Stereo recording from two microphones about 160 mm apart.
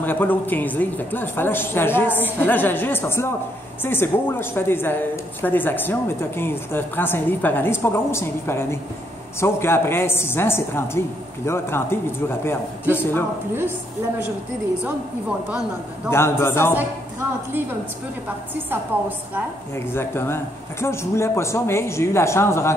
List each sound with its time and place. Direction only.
0.0 s speech: 10° left (ahead or behind)
16.1 s speech: 15° left (ahead or behind)
18.5 s a woman's voice: 10° right (ahead or behind)
19.7 s speech: 15° left (ahead or behind)